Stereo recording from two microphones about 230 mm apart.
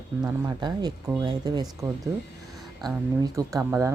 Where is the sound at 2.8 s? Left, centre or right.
Centre.